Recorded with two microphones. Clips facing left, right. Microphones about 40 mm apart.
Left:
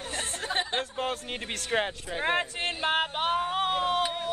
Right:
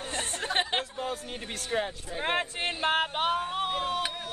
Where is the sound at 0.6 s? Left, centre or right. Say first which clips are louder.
Right 1 dB; right.